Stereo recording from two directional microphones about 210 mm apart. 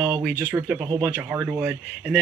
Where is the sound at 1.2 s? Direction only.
5° right (ahead or behind).